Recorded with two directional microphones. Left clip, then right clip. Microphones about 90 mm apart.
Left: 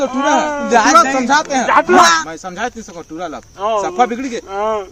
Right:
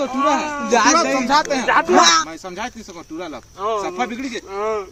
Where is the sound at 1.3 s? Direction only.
45° left (ahead or behind).